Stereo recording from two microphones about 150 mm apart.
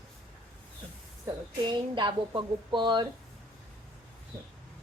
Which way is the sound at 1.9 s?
30° right (ahead or behind).